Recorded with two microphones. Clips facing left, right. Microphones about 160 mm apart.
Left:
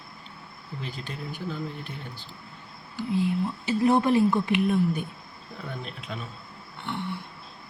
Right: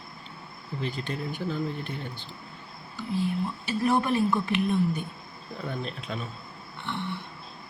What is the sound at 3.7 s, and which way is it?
A woman's voice, 20° left (ahead or behind).